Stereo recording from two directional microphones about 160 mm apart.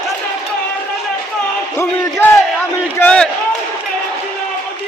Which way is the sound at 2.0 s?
15° left (ahead or behind).